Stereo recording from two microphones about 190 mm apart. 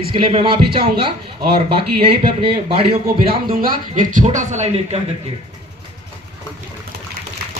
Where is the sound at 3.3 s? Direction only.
50° right (ahead or behind); by 5.0 s 35° right (ahead or behind).